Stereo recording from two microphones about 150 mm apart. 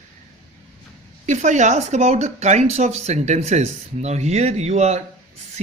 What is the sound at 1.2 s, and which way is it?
A woman's voice, 55° right (ahead or behind).